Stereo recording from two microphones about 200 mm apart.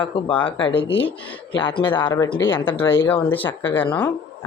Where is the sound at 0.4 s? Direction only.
25° left (ahead or behind); by 3.8 s 10° left (ahead or behind).